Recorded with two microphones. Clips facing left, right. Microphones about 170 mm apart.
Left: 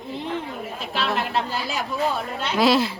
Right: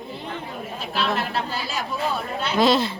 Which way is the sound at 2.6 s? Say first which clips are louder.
Even; 5° left (ahead or behind).